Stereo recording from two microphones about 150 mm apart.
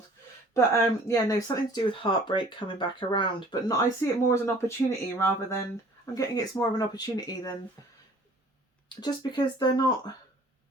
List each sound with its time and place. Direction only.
0.7 s speech: 20° left (ahead or behind)
1.9 s speech: 35° left (ahead or behind)
9.0 s speech: 30° left (ahead or behind)